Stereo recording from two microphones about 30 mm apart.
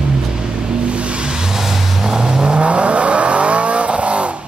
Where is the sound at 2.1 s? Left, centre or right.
Right.